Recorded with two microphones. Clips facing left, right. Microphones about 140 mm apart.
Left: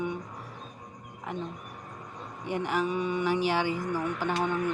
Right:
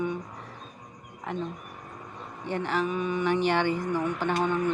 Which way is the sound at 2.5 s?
10° left (ahead or behind).